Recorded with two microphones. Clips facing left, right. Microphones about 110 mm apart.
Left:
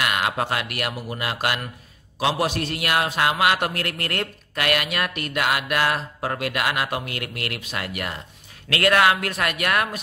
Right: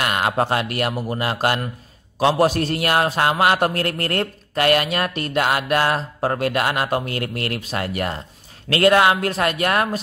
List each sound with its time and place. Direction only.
0.0 s a man's voice: 35° right (ahead or behind)